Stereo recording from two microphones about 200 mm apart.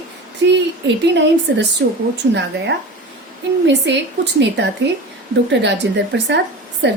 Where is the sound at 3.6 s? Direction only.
60° right (ahead or behind).